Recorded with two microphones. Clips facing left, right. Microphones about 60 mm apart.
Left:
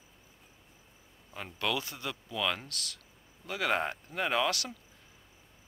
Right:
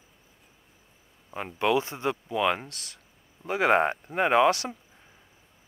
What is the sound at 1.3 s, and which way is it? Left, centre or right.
Speech, right.